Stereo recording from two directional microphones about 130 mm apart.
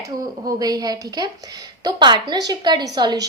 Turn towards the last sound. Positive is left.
turn(degrees=-30)  # may be behind; listen again after turning